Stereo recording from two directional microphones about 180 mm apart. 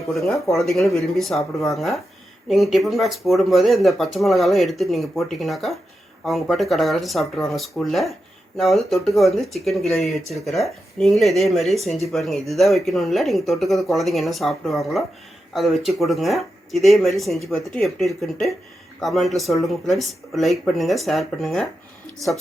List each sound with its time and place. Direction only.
0.1 s speech: centre (ahead or behind)